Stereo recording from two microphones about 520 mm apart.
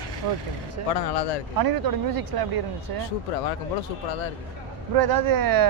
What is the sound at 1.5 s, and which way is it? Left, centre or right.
Speech, right.